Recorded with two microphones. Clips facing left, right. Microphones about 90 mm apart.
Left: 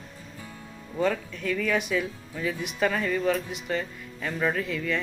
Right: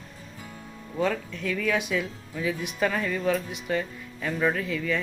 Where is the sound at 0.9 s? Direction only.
Centre (ahead or behind).